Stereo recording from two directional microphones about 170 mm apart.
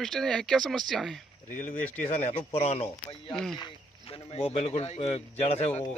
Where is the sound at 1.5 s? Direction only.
50° left (ahead or behind).